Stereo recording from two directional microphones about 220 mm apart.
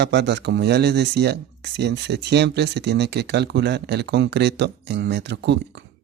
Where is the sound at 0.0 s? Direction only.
50° right (ahead or behind).